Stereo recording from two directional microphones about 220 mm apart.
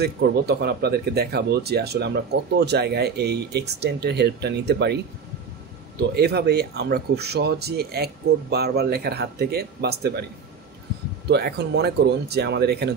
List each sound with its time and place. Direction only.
0.0 s speech: 50° right (ahead or behind)
11.2 s speech: 50° right (ahead or behind)